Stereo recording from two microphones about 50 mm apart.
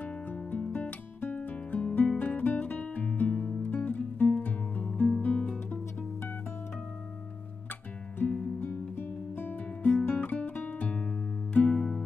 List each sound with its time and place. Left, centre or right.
0.3 s music: left
2.1 s music: left
5.7 s music: left
8.2 s music: left; by 12.0 s centre